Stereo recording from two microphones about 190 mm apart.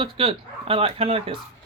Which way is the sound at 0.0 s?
30° right (ahead or behind).